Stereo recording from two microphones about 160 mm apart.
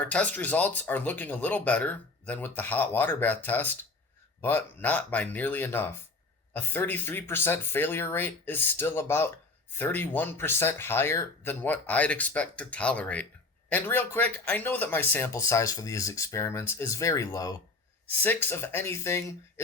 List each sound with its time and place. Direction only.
0.0 s speech: 10° left (ahead or behind)